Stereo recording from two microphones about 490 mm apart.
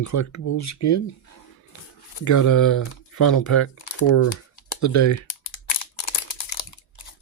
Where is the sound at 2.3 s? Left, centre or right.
Left.